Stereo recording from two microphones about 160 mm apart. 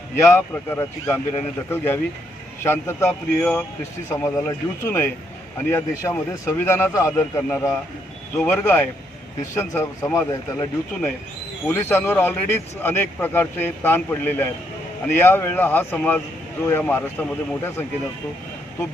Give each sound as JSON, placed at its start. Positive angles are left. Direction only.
{"t": 0.2, "sound": "speech", "side_deg": 15}